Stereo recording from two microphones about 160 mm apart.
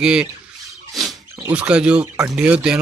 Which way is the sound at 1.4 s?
10° right (ahead or behind).